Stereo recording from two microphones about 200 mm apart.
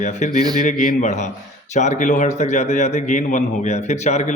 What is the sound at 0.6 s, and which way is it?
Speech, 40° left (ahead or behind).